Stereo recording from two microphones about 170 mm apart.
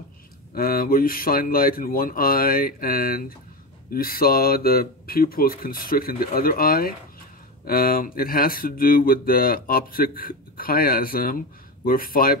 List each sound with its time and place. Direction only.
0.6 s speech: 60° left (ahead or behind)